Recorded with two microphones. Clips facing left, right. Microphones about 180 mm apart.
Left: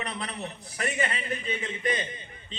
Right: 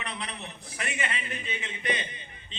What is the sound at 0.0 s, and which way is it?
A man's voice, 40° left (ahead or behind).